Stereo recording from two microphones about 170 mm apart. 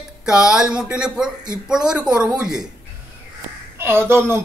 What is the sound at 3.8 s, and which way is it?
Speech, 15° right (ahead or behind).